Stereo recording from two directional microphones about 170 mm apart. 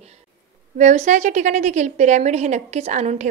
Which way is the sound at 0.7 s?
45° right (ahead or behind).